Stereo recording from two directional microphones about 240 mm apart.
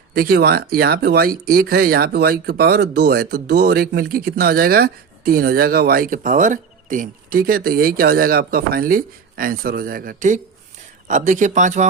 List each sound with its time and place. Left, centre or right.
0.1 s speech: right